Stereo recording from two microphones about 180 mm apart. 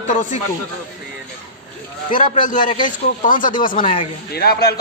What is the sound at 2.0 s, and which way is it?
A man's voice, 50° left (ahead or behind).